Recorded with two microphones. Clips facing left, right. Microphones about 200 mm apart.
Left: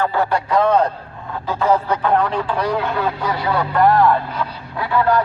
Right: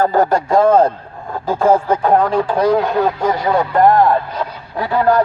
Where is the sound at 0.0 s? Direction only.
40° right (ahead or behind).